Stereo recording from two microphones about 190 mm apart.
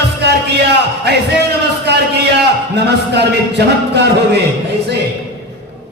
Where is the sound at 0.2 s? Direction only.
60° right (ahead or behind).